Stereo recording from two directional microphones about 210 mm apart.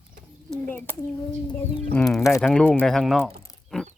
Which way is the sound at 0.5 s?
10° left (ahead or behind).